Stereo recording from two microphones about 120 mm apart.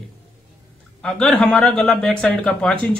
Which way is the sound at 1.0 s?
10° left (ahead or behind).